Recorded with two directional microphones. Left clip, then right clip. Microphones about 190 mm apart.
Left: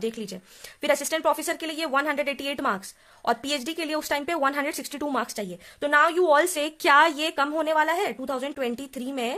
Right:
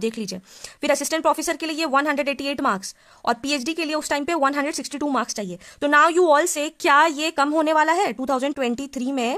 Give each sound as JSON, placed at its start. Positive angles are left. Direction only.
{"t": 0.0, "sound": "speech", "side_deg": -35}